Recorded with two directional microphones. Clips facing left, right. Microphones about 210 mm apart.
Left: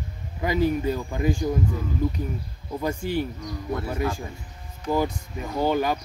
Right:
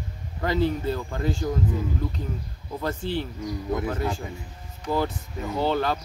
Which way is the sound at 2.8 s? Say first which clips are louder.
Left 2 dB; 10° left (ahead or behind).